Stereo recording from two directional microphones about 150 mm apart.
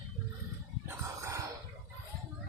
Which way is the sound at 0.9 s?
20° right (ahead or behind).